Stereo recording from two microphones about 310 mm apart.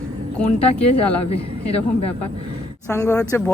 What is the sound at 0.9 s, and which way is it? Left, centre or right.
Speech, centre.